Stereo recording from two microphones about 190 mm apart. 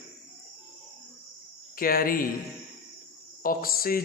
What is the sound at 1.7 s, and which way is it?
Speech, 50° left (ahead or behind).